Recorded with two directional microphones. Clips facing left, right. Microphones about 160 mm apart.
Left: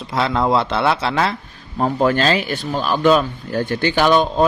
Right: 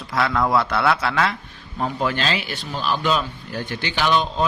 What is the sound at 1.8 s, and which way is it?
Speech, 45° left (ahead or behind).